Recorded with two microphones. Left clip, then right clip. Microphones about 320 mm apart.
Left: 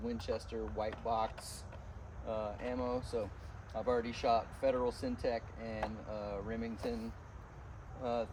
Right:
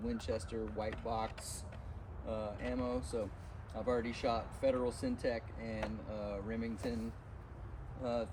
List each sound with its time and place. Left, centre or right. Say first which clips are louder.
0.0 s speech: left 1 dB; centre